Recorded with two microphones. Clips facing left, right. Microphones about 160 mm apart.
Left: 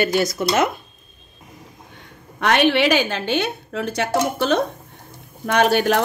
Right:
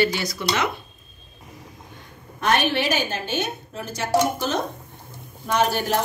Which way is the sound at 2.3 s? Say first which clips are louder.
Left 5 dB; 75° left (ahead or behind).